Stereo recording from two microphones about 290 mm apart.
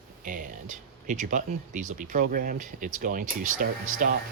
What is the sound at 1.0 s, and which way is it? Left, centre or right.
Speech, right.